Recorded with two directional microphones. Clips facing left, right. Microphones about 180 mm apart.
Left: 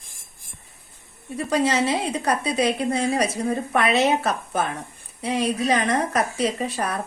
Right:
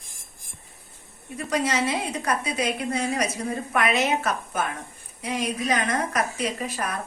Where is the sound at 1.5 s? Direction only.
30° left (ahead or behind).